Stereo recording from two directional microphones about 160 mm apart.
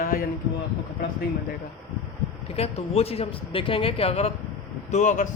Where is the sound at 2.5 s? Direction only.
40° left (ahead or behind).